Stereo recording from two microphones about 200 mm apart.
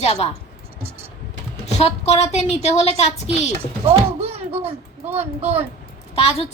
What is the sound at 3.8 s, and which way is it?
Speech, 30° right (ahead or behind).